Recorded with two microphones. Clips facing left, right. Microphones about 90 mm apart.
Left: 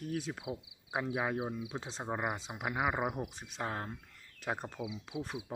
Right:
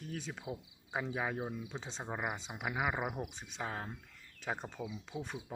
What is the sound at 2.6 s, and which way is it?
Speech, 15° left (ahead or behind).